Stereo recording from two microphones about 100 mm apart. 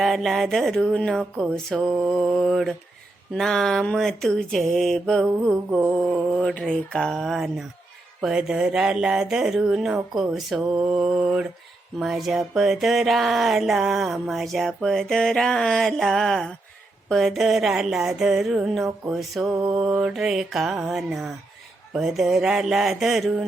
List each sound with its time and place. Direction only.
0.0 s music: centre (ahead or behind)
8.2 s speech: 10° right (ahead or behind)
11.9 s music: centre (ahead or behind)
19.5 s mantra: 35° right (ahead or behind)
19.8 s music: 10° right (ahead or behind)